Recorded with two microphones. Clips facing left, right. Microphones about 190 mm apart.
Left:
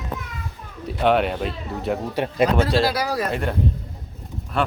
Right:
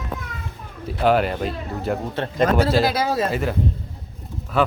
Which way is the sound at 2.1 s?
10° left (ahead or behind).